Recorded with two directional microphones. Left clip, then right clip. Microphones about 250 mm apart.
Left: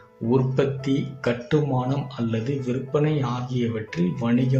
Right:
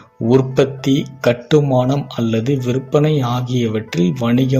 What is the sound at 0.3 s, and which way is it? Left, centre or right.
Speech, right.